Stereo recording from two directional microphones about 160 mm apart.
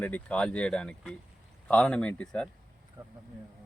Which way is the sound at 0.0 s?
10° left (ahead or behind).